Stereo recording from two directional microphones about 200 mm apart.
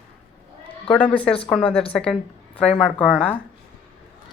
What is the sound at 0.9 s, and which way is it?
Speech, 5° left (ahead or behind).